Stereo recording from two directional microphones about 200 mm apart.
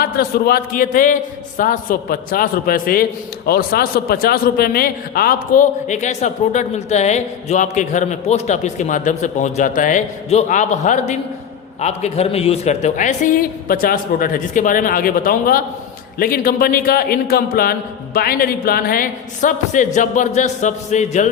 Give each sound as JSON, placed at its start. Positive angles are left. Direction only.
{"t": 0.0, "sound": "a man's voice", "side_deg": 50}